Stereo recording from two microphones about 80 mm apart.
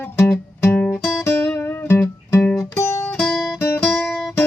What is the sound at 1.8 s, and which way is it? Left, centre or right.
Music, left.